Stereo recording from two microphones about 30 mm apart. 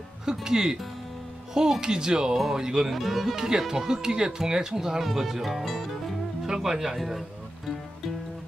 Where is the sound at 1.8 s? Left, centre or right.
Right.